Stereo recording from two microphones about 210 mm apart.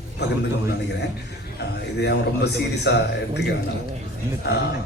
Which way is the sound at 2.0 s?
55° left (ahead or behind).